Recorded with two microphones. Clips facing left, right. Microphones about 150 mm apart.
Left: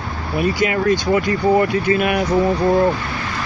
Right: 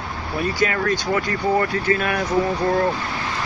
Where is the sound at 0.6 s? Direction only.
15° left (ahead or behind).